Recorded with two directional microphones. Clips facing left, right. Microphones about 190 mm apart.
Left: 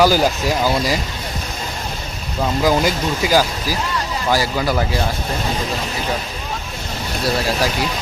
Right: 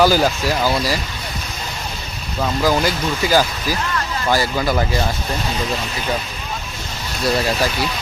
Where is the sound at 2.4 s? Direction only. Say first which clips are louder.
Left 1 dB; 20° left (ahead or behind).